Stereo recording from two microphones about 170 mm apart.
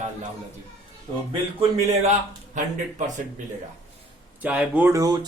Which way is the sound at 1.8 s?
45° right (ahead or behind).